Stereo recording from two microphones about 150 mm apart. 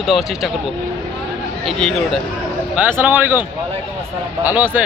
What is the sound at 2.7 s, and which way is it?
Speech, 10° right (ahead or behind).